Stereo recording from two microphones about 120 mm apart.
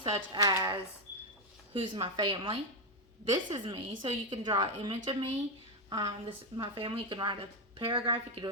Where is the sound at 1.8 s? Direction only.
45° right (ahead or behind).